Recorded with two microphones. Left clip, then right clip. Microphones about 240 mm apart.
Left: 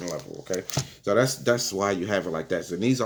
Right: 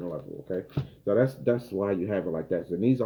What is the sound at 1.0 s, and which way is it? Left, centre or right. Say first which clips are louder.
Speech: left 2 dB; centre.